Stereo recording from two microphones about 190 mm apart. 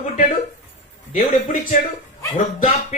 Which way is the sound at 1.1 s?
40° left (ahead or behind).